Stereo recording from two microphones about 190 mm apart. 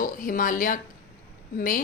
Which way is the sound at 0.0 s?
45° left (ahead or behind).